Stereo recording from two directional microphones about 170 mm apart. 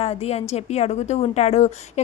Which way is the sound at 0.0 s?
35° left (ahead or behind).